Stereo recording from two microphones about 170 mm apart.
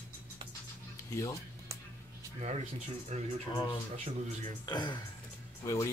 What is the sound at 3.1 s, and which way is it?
Speech, 40° right (ahead or behind).